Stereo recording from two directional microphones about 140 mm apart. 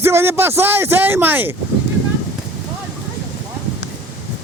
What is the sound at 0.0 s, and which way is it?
Speech, 15° right (ahead or behind).